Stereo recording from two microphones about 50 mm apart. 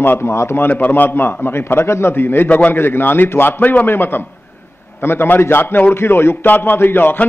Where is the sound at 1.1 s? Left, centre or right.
Left.